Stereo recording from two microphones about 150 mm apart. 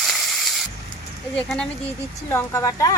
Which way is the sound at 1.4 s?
5° left (ahead or behind).